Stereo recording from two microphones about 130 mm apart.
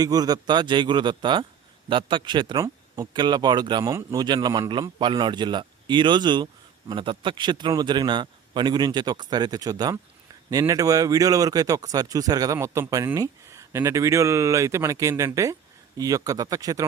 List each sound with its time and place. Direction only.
0.0 s a man's voice: 30° right (ahead or behind)